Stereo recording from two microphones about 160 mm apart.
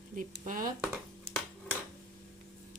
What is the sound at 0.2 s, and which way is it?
Speech, 55° right (ahead or behind).